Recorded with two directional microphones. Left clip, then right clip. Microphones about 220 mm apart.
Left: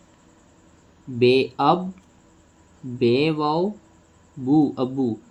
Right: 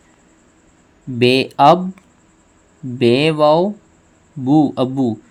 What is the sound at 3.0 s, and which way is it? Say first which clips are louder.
Speech: right 7 dB; 55° right (ahead or behind).